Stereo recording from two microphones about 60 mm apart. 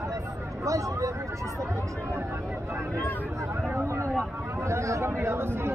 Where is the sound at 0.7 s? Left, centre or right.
Right.